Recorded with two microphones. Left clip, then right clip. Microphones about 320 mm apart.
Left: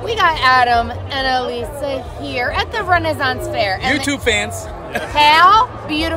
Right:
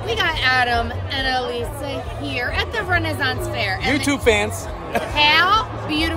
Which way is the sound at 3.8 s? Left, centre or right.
Centre.